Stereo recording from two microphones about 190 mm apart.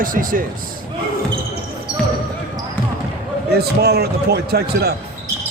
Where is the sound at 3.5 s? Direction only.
55° right (ahead or behind).